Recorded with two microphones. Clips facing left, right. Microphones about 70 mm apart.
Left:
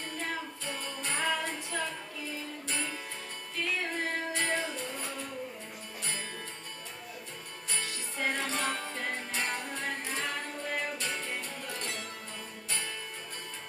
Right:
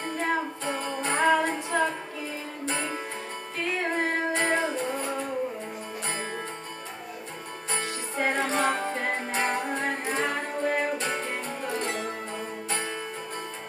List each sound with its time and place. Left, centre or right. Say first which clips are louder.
0.0 s music: right 9 dB; right
7.7 s music: right 7 dB; right